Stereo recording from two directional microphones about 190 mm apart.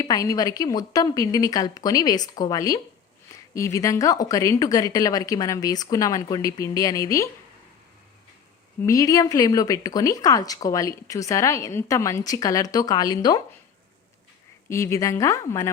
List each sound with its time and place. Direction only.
0.0 s a woman's voice: 20° left (ahead or behind)
8.8 s speech: 15° left (ahead or behind)
14.7 s speech: 15° left (ahead or behind)